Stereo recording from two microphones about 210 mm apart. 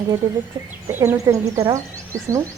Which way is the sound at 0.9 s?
10° right (ahead or behind).